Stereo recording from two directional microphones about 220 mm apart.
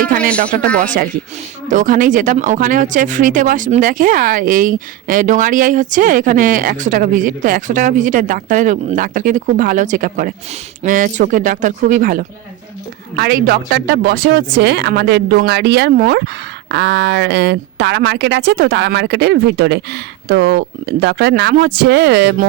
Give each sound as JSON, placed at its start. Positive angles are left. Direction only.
{"t": 0.5, "sound": "speech", "side_deg": -40}